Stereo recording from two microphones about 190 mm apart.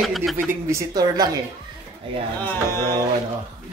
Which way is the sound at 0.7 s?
15° right (ahead or behind).